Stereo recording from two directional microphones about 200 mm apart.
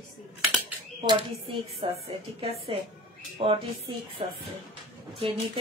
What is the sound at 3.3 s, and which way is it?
Speech, 25° right (ahead or behind).